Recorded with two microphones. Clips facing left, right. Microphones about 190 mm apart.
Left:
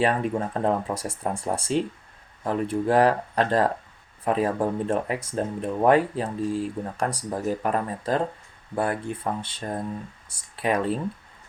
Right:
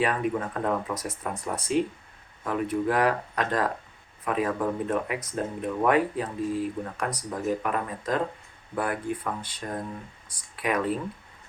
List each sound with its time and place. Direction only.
0.0 s speech: 30° left (ahead or behind)